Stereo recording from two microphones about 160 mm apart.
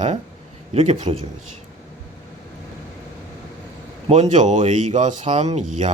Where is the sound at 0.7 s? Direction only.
40° right (ahead or behind).